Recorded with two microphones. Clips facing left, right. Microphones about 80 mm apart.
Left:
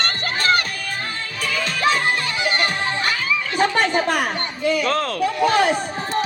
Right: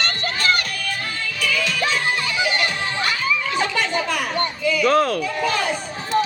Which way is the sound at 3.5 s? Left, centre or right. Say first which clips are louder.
Left 3 dB; left.